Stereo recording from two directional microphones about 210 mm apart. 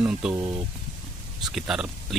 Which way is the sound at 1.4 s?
Centre (ahead or behind).